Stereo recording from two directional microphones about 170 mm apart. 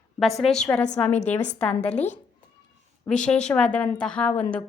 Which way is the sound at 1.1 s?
40° left (ahead or behind).